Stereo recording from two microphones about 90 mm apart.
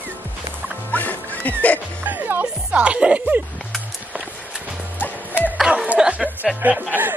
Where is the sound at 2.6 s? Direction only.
15° right (ahead or behind).